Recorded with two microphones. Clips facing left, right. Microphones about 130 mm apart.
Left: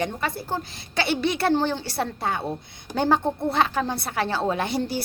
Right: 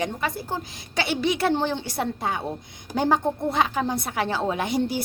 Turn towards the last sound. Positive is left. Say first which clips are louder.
# right 1 dB
turn(degrees=-15)  # may be behind; listen again after turning